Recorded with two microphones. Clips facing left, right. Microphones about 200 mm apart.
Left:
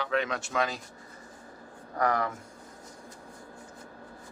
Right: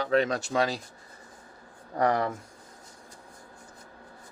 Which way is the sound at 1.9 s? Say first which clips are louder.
Right 3 dB; 30° right (ahead or behind).